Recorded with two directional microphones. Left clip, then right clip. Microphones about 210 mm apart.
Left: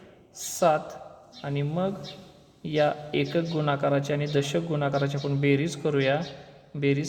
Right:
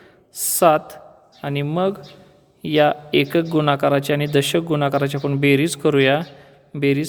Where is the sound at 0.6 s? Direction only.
45° right (ahead or behind).